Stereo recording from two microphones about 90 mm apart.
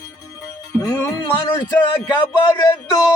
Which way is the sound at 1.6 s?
60° left (ahead or behind).